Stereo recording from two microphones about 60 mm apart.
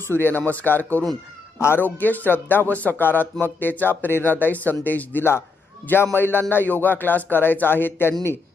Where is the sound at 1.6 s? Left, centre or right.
Left.